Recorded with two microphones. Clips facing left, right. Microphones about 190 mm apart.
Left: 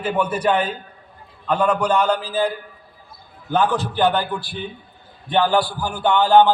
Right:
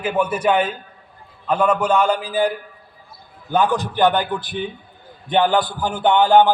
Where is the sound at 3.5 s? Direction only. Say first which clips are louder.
Right 1 dB; 15° right (ahead or behind).